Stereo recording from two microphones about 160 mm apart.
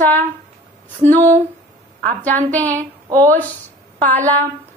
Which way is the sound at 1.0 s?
50° right (ahead or behind).